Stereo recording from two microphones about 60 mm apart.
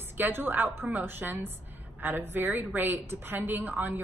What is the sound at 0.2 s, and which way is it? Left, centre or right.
A woman's voice, right.